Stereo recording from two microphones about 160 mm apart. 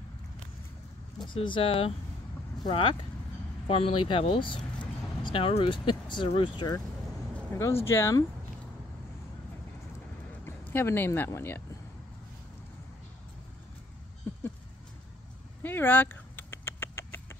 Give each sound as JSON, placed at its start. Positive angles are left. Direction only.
{"t": 1.3, "sound": "speech", "side_deg": 30}
{"t": 7.3, "sound": "a sound", "side_deg": 15}
{"t": 7.9, "sound": "speech", "side_deg": 20}
{"t": 10.7, "sound": "speech", "side_deg": 15}
{"t": 15.6, "sound": "rodents", "side_deg": 15}